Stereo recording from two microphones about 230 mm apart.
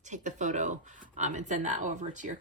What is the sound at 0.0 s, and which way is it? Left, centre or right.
Speech, right.